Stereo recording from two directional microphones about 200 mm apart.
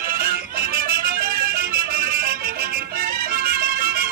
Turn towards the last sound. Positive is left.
turn(degrees=-45)  # may be behind; listen again after turning